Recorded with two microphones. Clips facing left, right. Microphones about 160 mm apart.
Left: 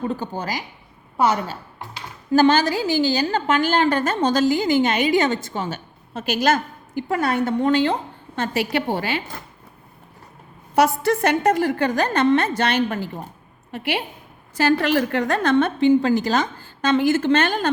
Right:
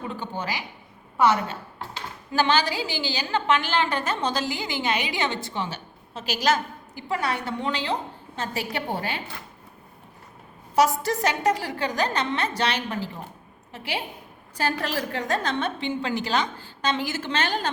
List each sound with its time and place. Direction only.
0.1 s a woman's voice: 40° left (ahead or behind)
8.7 s a woman's voice: 85° left
10.8 s a woman's voice: 60° left (ahead or behind)
13.7 s a woman's voice: 65° left (ahead or behind)
14.5 s a woman's voice: 80° left; by 17.7 s 55° left (ahead or behind)